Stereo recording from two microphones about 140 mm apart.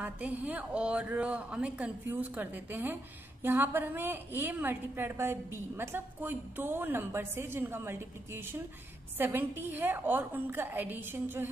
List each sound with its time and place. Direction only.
0.0 s a woman's voice: 10° right (ahead or behind)